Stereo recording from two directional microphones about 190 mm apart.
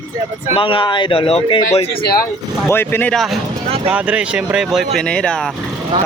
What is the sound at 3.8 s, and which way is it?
Speech, 5° right (ahead or behind).